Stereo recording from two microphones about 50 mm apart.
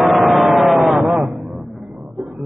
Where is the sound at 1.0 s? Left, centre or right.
Centre.